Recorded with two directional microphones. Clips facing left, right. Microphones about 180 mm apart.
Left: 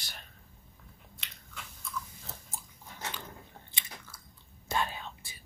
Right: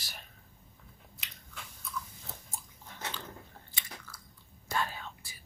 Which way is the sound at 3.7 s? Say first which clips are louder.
Even; 25° left (ahead or behind).